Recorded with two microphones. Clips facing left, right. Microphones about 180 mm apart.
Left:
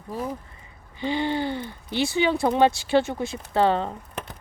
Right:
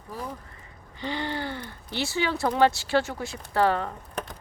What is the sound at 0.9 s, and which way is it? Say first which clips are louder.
Speech: left 6 dB; 15° left (ahead or behind).